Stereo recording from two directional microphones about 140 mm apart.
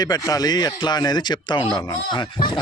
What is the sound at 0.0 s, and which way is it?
A man's voice, 30° left (ahead or behind).